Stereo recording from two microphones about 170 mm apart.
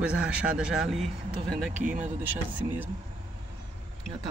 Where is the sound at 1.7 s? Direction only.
45° right (ahead or behind).